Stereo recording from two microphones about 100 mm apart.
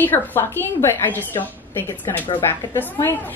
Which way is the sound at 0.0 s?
20° left (ahead or behind).